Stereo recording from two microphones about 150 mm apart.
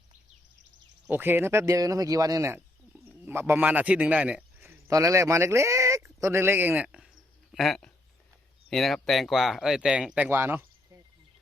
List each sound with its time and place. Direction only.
1.0 s a man's voice: 10° right (ahead or behind)